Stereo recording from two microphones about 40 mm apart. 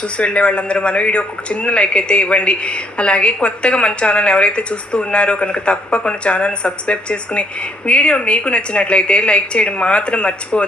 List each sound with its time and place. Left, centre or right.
0.0 s speech: left